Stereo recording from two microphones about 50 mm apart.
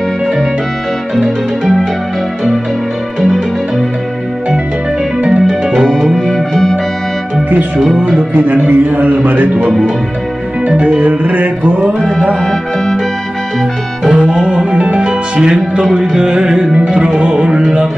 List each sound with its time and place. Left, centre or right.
1.2 s music: centre
5.5 s music: centre
5.9 s music: centre
8.5 s a man's voice: right
9.7 s speech: centre
10.8 s a man's voice: right
12.4 s music: centre
14.0 s music: centre